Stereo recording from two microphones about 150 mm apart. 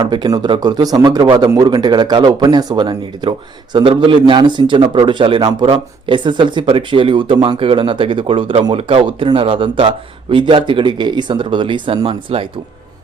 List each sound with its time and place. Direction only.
0.0 s speech: 25° right (ahead or behind)